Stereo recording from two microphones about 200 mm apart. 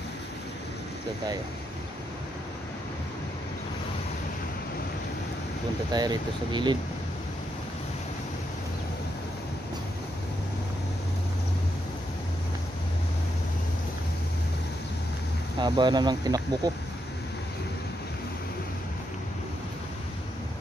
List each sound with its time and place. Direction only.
5.9 s speech: 20° right (ahead or behind)
15.6 s speech: 20° right (ahead or behind)